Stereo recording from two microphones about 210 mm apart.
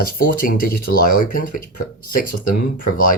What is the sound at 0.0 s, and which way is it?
Speech, 45° left (ahead or behind).